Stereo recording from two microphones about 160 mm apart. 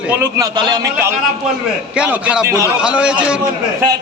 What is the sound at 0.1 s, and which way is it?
Speech, 20° right (ahead or behind).